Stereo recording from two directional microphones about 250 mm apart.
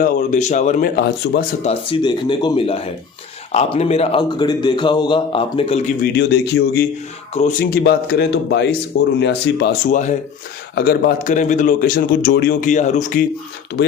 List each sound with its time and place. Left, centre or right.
0.0 s speech: left
1.6 s a man's voice: left
6.1 s speech: left
7.3 s a man's voice: left
7.9 s speech: left